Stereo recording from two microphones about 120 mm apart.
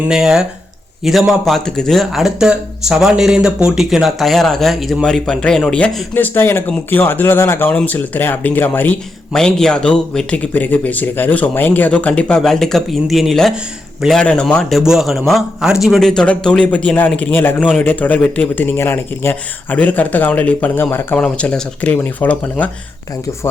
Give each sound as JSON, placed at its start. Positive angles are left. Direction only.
{"t": 0.1, "sound": "speech", "side_deg": -5}
{"t": 6.1, "sound": "speech", "side_deg": 15}
{"t": 9.3, "sound": "speech", "side_deg": 5}